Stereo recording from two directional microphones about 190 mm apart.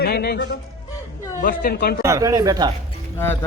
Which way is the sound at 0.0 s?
55° left (ahead or behind).